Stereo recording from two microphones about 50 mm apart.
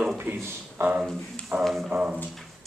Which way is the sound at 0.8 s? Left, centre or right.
Right.